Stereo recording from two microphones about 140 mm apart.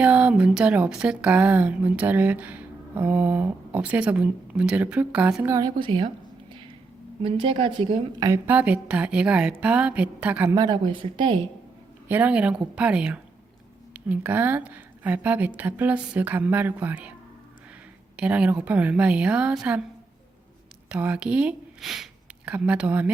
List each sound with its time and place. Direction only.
0.0 s speech: 10° right (ahead or behind)
5.5 s speech: 30° right (ahead or behind)
7.2 s speech: 40° right (ahead or behind)
8.4 s speech: 10° right (ahead or behind)
10.5 s speech: 30° right (ahead or behind)
12.0 s speech: 15° right (ahead or behind)
18.2 s speech: 10° right (ahead or behind)
20.9 s speech: 10° right (ahead or behind)